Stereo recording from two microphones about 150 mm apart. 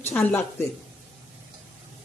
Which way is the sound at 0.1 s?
10° left (ahead or behind).